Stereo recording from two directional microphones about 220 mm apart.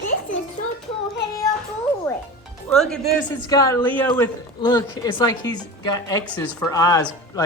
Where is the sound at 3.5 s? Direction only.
15° left (ahead or behind).